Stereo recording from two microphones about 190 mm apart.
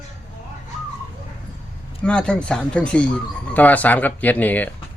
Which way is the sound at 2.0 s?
5° left (ahead or behind).